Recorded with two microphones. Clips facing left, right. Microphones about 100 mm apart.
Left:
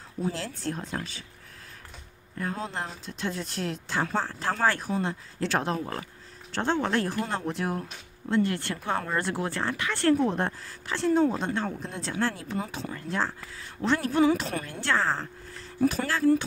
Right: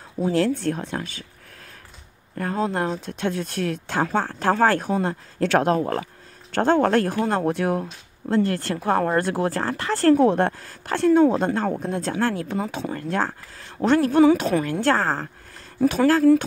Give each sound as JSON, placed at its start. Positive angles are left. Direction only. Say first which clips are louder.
{"t": 0.4, "sound": "speech", "louder": "right 11 dB", "side_deg": -65}
{"t": 2.3, "sound": "speech", "louder": "right 8 dB", "side_deg": -60}
{"t": 8.3, "sound": "speech", "louder": "right 4 dB", "side_deg": -40}
{"t": 10.1, "sound": "speech", "louder": "right 8 dB", "side_deg": -70}
{"t": 14.8, "sound": "speech", "louder": "right 6 dB", "side_deg": -45}